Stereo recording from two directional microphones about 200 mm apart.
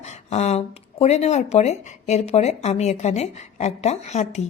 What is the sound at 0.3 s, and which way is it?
A woman's voice, 30° left (ahead or behind).